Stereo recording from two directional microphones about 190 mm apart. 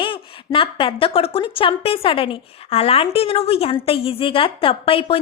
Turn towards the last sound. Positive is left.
turn(degrees=30)  # may be behind; listen again after turning